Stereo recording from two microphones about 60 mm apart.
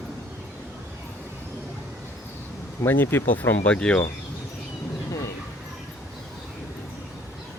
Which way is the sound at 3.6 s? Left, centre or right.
Centre.